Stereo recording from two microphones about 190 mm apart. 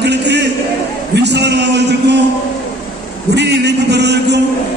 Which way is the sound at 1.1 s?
65° right (ahead or behind).